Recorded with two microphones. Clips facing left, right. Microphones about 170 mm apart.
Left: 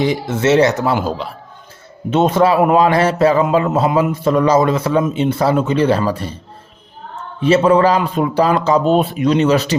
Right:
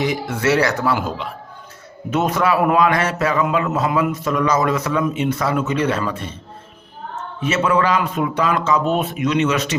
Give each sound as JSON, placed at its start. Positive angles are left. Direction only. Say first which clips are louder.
{"t": 0.0, "sound": "a man's voice", "louder": "left 4 dB", "side_deg": 25}
{"t": 7.4, "sound": "speech", "louder": "left 7 dB", "side_deg": 30}